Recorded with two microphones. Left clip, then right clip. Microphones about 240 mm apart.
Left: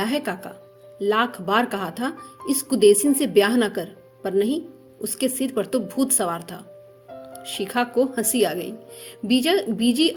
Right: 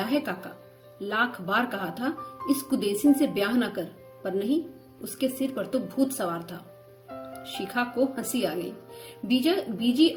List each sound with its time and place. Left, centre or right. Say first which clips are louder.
0.0 s speech: left 3 dB; left